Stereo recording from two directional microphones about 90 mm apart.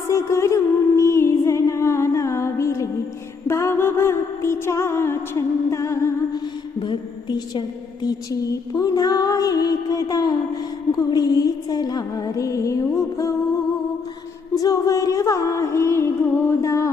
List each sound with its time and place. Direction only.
0.1 s music: 30° left (ahead or behind)
6.3 s music: 55° left (ahead or behind)
8.0 s music: 45° left (ahead or behind)
14.5 s music: 40° left (ahead or behind)